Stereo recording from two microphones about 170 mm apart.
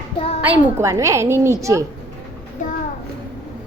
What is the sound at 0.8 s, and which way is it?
A woman's voice, 15° right (ahead or behind).